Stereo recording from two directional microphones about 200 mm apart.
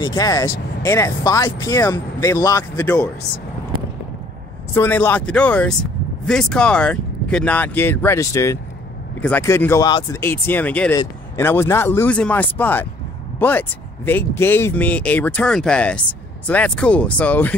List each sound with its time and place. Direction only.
0.0 s speech: 20° left (ahead or behind)
4.7 s speech: 10° left (ahead or behind)